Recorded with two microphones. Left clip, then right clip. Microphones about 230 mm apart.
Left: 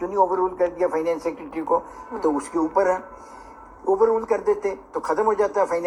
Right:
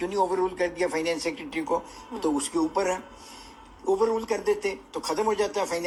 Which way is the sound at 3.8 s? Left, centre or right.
Right.